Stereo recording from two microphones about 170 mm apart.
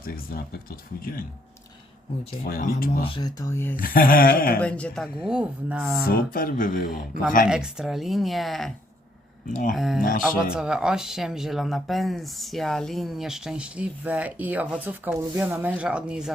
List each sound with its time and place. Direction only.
0.0 s speech: 60° left (ahead or behind)
2.4 s speech: 55° left (ahead or behind)
3.0 s speech: 25° left (ahead or behind)
3.8 s speech: 55° left (ahead or behind)
4.6 s speech: 5° left (ahead or behind)
5.2 s speech: 5° right (ahead or behind)
6.1 s speech: 60° left (ahead or behind)
7.4 s speech: 5° right (ahead or behind)
9.5 s speech: 50° left (ahead or behind)
9.7 s speech: centre (ahead or behind)